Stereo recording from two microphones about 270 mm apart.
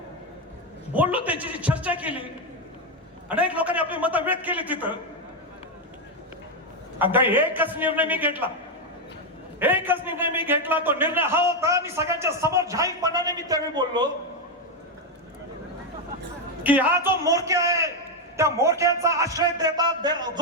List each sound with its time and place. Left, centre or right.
0.9 s a man's voice: centre
3.2 s a man's voice: centre
7.0 s a man's voice: centre
9.6 s a man's voice: centre
16.6 s a man's voice: centre